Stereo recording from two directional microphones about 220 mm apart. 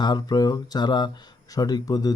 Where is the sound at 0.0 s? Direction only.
20° left (ahead or behind).